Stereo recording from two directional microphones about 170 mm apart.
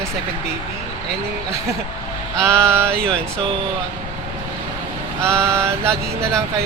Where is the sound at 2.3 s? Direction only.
15° right (ahead or behind).